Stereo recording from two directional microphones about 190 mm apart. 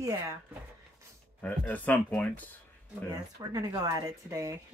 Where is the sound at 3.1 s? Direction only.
20° right (ahead or behind).